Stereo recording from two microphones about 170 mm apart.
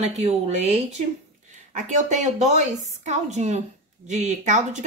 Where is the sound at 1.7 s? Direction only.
45° right (ahead or behind).